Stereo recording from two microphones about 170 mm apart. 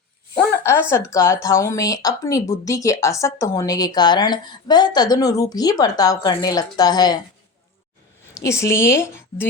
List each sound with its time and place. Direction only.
0.3 s speech: 15° left (ahead or behind)
8.3 s a woman's voice: 15° left (ahead or behind)